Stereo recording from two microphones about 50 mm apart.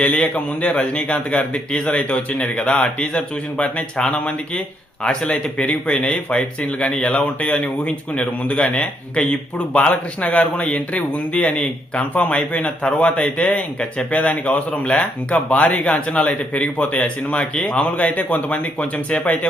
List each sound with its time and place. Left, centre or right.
0.0 s speech: left